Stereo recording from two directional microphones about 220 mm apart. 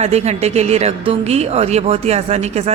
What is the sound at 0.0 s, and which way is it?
Speech, 30° right (ahead or behind).